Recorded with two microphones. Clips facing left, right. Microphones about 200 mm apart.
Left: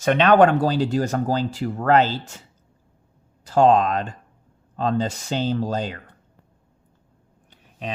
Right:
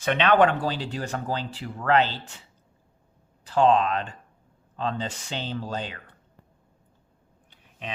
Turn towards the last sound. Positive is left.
turn(degrees=40)  # may be behind; listen again after turning